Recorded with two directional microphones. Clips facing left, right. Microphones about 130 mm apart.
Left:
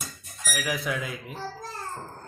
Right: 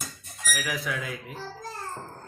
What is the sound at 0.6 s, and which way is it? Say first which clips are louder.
Speech: left 4 dB; 15° left (ahead or behind).